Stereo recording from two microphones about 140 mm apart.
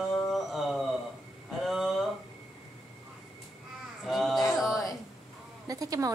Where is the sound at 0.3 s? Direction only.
Centre (ahead or behind).